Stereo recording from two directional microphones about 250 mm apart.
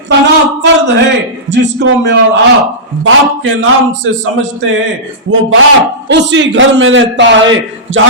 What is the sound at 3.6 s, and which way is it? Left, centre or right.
A man's voice, right.